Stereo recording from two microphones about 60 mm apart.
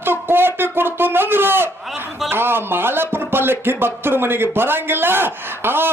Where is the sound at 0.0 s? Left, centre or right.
Right.